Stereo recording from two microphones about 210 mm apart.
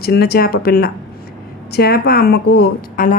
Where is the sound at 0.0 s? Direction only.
50° left (ahead or behind).